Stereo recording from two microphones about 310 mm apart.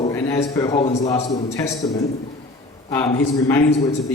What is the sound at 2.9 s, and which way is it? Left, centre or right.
Speech, centre.